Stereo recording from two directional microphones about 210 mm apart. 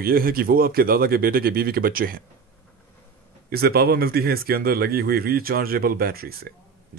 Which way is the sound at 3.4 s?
45° right (ahead or behind).